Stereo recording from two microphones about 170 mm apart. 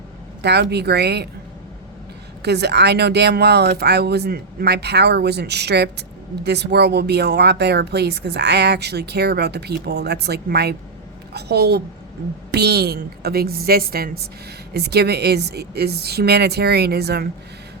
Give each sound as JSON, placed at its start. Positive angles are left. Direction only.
{"t": 0.4, "sound": "speech", "side_deg": -75}
{"t": 2.4, "sound": "a woman's voice", "side_deg": -80}